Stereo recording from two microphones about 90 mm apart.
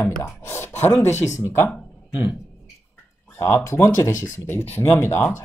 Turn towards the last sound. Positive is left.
turn(degrees=25)  # may be behind; listen again after turning